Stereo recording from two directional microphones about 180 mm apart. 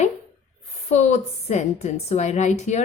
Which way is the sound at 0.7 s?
35° left (ahead or behind).